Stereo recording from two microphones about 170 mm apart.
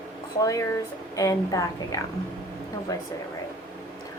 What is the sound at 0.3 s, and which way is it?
A woman's voice, 20° left (ahead or behind).